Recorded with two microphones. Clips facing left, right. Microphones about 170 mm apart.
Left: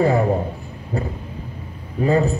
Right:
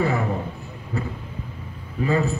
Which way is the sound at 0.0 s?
35° left (ahead or behind).